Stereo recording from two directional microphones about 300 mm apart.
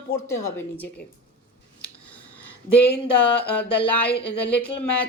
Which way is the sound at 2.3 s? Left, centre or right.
Left.